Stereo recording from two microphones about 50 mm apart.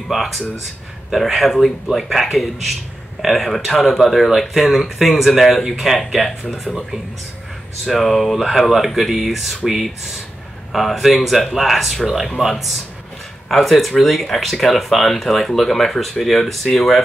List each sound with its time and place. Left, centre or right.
0.1 s speech: centre